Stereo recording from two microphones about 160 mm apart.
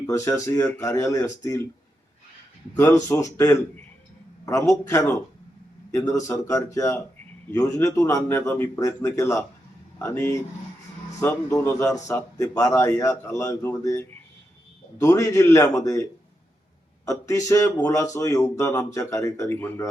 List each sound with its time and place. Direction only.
0.1 s speech: 15° left (ahead or behind)
2.7 s speech: 15° left (ahead or behind)
17.1 s speech: 20° left (ahead or behind)